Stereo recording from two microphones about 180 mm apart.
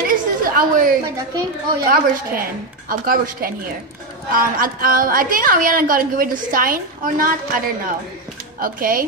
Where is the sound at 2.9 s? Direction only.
55° right (ahead or behind).